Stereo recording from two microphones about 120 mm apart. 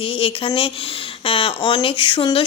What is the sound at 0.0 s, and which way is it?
Speech, 50° left (ahead or behind).